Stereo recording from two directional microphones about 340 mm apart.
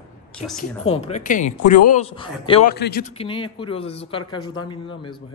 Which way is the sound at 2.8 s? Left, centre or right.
Left.